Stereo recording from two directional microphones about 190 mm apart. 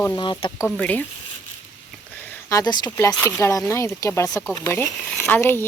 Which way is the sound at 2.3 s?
20° left (ahead or behind).